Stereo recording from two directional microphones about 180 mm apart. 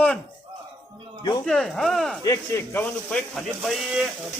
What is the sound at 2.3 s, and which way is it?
Speech, 15° left (ahead or behind).